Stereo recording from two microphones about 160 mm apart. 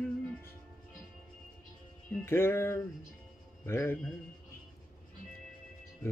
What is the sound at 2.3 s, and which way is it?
Music, 15° left (ahead or behind).